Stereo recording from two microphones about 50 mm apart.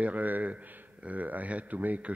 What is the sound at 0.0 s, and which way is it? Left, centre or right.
Speech, right.